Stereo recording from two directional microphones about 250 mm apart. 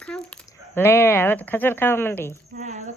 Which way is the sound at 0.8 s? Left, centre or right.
Centre.